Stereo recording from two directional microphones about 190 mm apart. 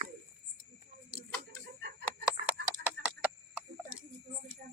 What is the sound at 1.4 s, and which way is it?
Chicken, 55° right (ahead or behind).